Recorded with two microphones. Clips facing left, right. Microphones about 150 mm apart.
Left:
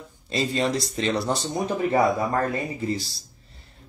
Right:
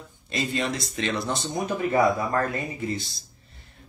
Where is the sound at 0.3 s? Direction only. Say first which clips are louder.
Left 3 dB; 30° left (ahead or behind).